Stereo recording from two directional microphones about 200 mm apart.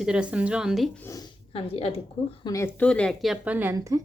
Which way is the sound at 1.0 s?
20° left (ahead or behind).